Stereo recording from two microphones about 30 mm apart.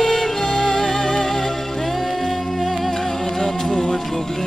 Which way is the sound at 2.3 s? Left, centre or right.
Centre.